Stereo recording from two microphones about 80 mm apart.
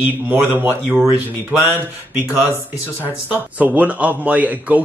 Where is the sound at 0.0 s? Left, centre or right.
Right.